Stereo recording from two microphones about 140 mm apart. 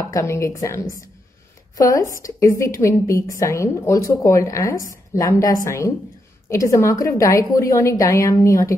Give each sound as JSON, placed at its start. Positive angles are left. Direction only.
{"t": 0.1, "sound": "a woman's voice", "side_deg": 20}